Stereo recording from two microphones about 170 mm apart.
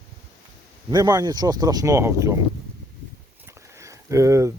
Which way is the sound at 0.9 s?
25° right (ahead or behind).